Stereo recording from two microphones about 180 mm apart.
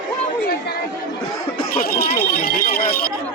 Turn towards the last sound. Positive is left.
turn(degrees=50)  # may be behind; listen again after turning